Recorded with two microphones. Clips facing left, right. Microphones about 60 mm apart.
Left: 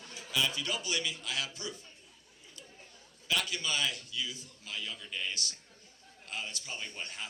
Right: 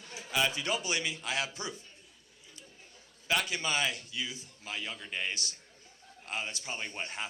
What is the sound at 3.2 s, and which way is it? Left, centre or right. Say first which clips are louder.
A man's voice: right 2 dB; right.